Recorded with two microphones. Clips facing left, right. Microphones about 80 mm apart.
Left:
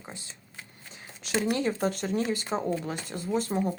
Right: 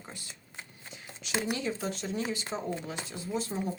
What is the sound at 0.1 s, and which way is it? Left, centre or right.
Speech, left.